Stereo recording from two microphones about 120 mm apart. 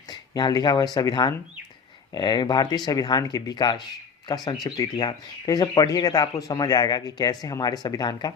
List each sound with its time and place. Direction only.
0.1 s speech: 35° left (ahead or behind)